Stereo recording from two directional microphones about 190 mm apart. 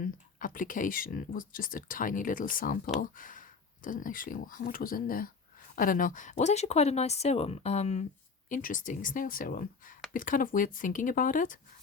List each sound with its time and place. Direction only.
0.0 s speech: 45° left (ahead or behind)